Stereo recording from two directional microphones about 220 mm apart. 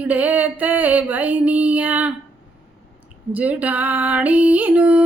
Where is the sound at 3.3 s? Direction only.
5° right (ahead or behind).